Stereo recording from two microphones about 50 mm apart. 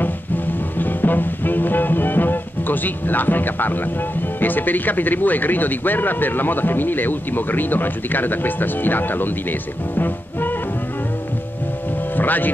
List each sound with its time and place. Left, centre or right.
0.0 s music: left
4.4 s speech: left
12.2 s speech: left